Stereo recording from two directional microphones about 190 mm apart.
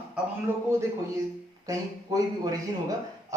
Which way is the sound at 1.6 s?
20° right (ahead or behind).